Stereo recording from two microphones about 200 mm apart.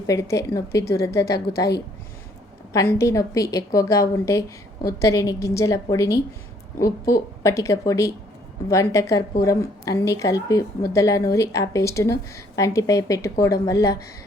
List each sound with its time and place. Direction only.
0.1 s a woman's voice: 15° left (ahead or behind)
2.7 s a woman's voice: 15° left (ahead or behind)